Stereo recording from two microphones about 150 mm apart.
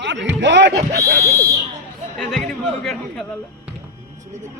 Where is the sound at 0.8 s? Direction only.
80° right.